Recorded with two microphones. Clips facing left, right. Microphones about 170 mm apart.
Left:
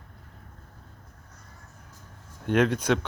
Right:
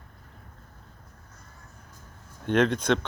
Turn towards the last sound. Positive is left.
turn(degrees=10)  # may be behind; listen again after turning